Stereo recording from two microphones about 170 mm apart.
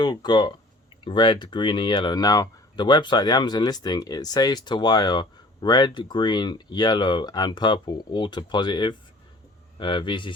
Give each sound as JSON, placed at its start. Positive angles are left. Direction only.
{"t": 0.0, "sound": "speech", "side_deg": 25}